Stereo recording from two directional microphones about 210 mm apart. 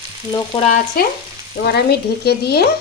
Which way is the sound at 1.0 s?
45° left (ahead or behind).